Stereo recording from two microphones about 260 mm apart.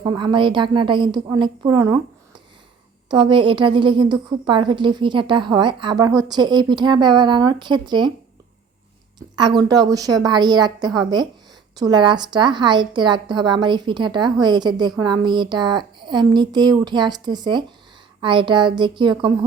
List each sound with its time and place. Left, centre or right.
0.0 s a woman's voice: centre
3.1 s a woman's voice: centre
9.1 s a woman's voice: centre